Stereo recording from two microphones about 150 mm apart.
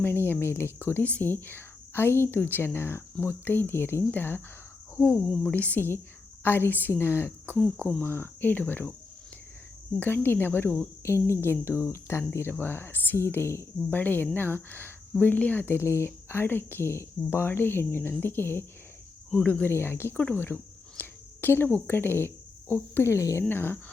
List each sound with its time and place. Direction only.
0.0 s a woman's voice: 15° left (ahead or behind)
10.0 s a woman's voice: 15° left (ahead or behind)